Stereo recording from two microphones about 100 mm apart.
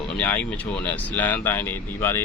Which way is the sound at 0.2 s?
15° left (ahead or behind).